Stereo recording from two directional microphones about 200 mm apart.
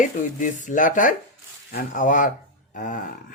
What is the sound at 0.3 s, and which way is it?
Speech, 40° left (ahead or behind).